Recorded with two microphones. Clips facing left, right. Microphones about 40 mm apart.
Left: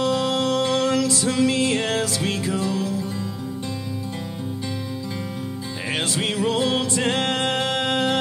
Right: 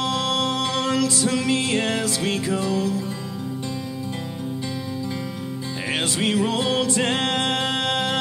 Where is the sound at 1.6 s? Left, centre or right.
Centre.